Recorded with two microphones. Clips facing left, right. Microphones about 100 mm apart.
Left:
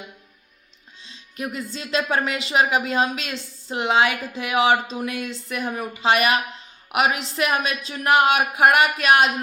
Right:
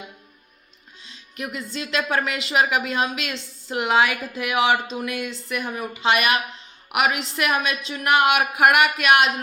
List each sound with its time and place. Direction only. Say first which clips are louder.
1.0 s music: left 2 dB; 30° left (ahead or behind)
1.7 s a woman's voice: even; 35° left (ahead or behind)